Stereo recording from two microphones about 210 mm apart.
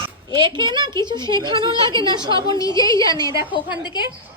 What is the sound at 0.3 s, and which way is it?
A woman's voice, 20° right (ahead or behind).